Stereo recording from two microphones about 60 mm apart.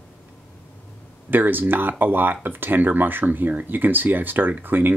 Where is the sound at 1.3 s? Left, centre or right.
Right.